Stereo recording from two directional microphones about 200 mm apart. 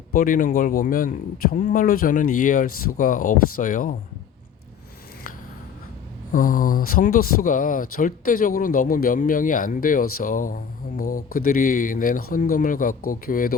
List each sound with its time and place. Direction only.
0.1 s speech: 45° left (ahead or behind)
6.3 s speech: 45° left (ahead or behind)